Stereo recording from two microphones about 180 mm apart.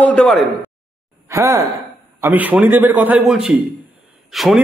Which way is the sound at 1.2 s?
20° right (ahead or behind).